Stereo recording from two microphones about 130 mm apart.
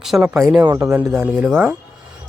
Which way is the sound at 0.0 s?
Centre (ahead or behind).